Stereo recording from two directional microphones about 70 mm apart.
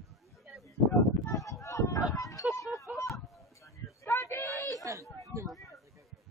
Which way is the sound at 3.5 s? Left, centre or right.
Left.